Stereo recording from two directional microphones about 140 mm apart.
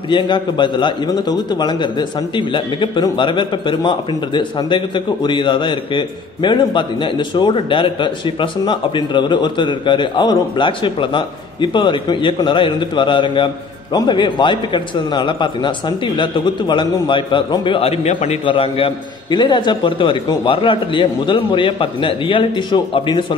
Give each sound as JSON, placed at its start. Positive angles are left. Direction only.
{"t": 0.1, "sound": "a man's voice", "side_deg": 35}